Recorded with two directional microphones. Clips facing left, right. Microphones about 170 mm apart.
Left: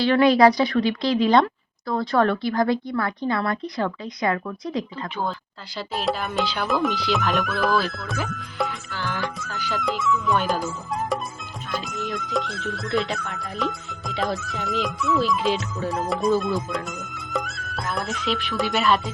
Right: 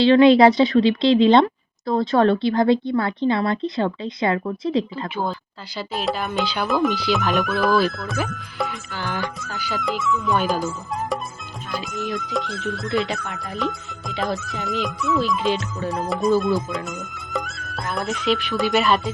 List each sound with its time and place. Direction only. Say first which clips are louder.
0.0 s speech: right 4 dB; 25° right (ahead or behind)
5.7 s speech: right 1 dB; centre (ahead or behind)
8.9 s speech: right 2 dB; 20° right (ahead or behind)
9.2 s speech: even; centre (ahead or behind)
11.7 s speech: right 2 dB; centre (ahead or behind)